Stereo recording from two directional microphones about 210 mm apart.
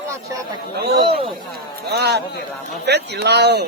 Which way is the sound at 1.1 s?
25° right (ahead or behind).